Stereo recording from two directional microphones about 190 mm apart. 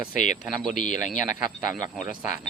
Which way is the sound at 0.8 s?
40° left (ahead or behind).